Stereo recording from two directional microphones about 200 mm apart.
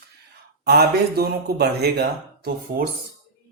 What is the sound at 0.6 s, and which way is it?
Speech, 50° right (ahead or behind).